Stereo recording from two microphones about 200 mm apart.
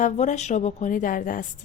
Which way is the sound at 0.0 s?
35° left (ahead or behind).